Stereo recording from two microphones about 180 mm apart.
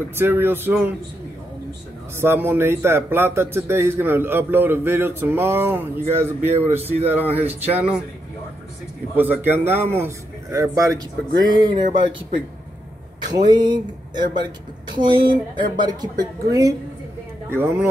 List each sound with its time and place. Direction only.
0.1 s speech: 10° right (ahead or behind)
2.1 s speech: 10° right (ahead or behind)
9.1 s speech: 10° right (ahead or behind)
13.5 s a woman's voice: 25° right (ahead or behind)
15.2 s speech: 55° right (ahead or behind)
15.8 s a woman's voice: 20° right (ahead or behind)